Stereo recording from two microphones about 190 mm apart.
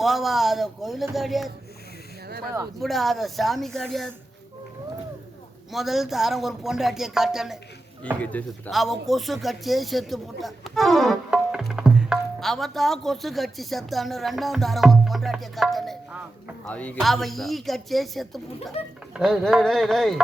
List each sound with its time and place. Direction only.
0.0 s speech: centre (ahead or behind)
2.2 s speech: 55° right (ahead or behind)
2.8 s speech: centre (ahead or behind)
5.7 s speech: centre (ahead or behind)
8.2 s speech: 10° left (ahead or behind)